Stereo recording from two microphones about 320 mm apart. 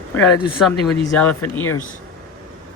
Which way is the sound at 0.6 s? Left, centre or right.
Centre.